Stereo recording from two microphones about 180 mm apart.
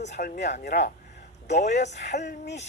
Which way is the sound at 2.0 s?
70° left (ahead or behind).